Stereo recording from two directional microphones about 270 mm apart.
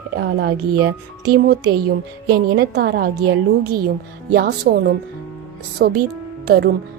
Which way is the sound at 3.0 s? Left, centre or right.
Right.